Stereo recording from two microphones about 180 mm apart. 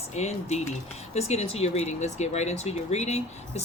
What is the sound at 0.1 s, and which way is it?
Speech, 40° left (ahead or behind).